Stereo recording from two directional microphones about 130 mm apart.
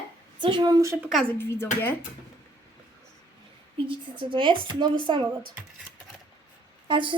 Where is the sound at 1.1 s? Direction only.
Centre (ahead or behind).